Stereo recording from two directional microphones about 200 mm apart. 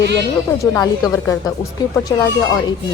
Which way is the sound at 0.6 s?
15° left (ahead or behind).